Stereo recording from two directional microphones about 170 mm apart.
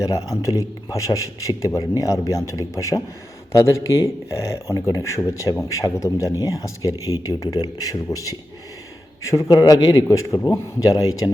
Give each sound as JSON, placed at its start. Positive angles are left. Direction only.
{"t": 0.0, "sound": "a man's voice", "side_deg": 20}